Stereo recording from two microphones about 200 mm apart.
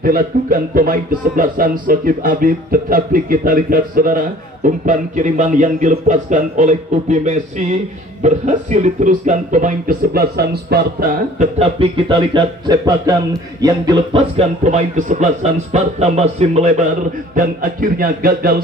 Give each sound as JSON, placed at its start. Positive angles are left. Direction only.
{"t": 0.0, "sound": "speech", "side_deg": -45}
{"t": 11.5, "sound": "speech", "side_deg": -30}
{"t": 17.4, "sound": "speech", "side_deg": -45}